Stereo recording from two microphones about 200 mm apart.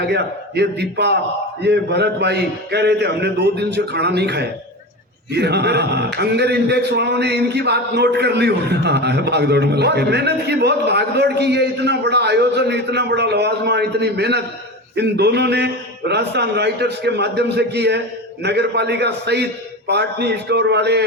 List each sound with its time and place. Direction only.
0.1 s speech: 55° right (ahead or behind)